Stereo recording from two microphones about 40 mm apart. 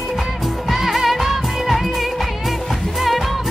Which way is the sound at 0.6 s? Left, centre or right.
Centre.